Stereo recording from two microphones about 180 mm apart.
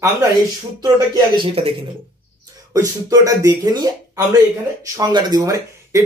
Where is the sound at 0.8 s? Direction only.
25° right (ahead or behind).